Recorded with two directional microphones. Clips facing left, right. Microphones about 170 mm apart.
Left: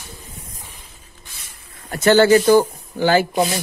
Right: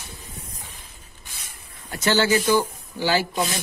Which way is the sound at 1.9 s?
55° left (ahead or behind).